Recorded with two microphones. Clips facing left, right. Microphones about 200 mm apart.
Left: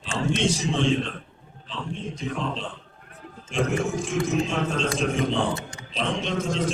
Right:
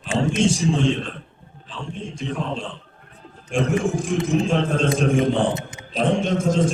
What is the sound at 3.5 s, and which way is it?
Speech, 50° right (ahead or behind).